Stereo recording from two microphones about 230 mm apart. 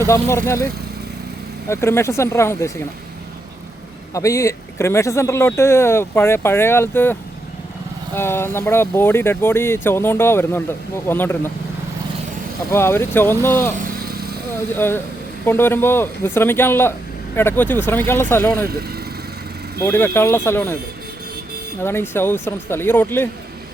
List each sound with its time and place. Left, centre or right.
0.0 s speech: centre
1.7 s speech: centre
4.1 s speech: centre
12.7 s speech: centre
13.7 s vehicle: right
14.8 s speech: centre
18.6 s speech: right
19.8 s speech: centre
21.8 s speech: centre